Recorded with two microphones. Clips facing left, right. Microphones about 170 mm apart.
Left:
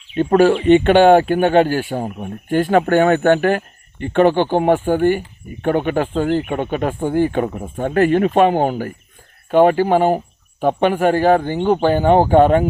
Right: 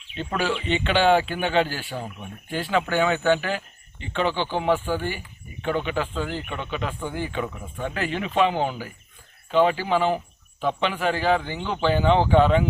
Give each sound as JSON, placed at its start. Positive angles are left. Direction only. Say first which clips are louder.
{"t": 0.2, "sound": "speech", "louder": "left 13 dB", "side_deg": 50}